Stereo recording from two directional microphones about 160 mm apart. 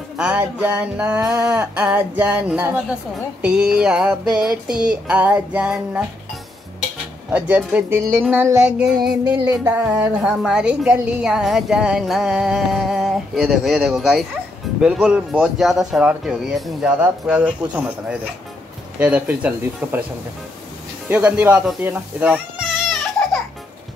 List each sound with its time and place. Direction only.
0.2 s a woman's voice: 5° right (ahead or behind)
7.2 s speech: 10° right (ahead or behind)
9.2 s music: 25° right (ahead or behind)
9.7 s speech: 15° right (ahead or behind)
10.1 s a woman's voice: centre (ahead or behind)
21.1 s a child's voice: 10° right (ahead or behind)